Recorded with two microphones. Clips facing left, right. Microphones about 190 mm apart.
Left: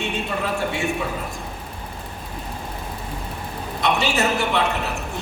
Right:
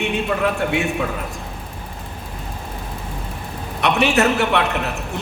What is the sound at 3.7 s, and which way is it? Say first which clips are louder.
Speech: right 4 dB; 65° right (ahead or behind).